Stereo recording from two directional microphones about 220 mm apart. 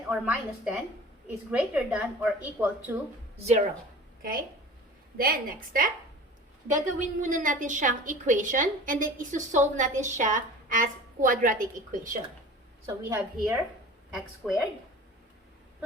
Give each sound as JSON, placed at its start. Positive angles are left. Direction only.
{"t": 0.1, "sound": "a woman's voice", "side_deg": -5}
{"t": 5.1, "sound": "a woman's voice", "side_deg": -40}
{"t": 12.9, "sound": "a woman's voice", "side_deg": -10}